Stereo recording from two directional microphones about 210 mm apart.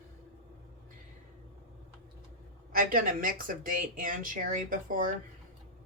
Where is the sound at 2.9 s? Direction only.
40° right (ahead or behind).